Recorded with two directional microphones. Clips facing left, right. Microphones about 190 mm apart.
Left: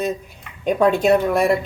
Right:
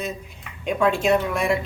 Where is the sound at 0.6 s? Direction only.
40° left (ahead or behind).